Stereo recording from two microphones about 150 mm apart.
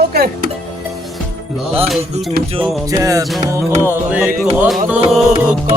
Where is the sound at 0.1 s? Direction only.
90° right.